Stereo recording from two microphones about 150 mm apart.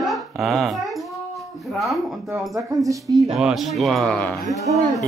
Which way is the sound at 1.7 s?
Centre (ahead or behind).